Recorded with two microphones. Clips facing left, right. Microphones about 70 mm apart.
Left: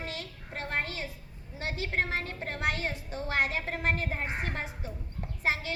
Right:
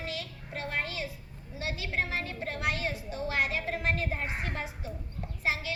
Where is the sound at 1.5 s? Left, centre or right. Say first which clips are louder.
Left 1 dB; left.